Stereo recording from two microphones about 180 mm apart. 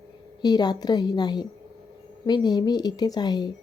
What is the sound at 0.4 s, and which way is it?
A woman's voice, 25° left (ahead or behind).